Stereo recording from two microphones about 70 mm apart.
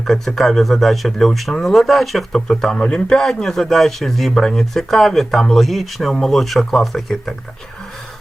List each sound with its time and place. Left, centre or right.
0.0 s speech: centre